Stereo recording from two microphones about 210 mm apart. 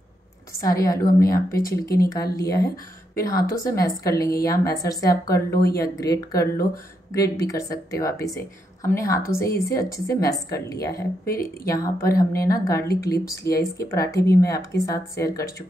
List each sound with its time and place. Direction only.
0.5 s a woman's voice: 15° left (ahead or behind)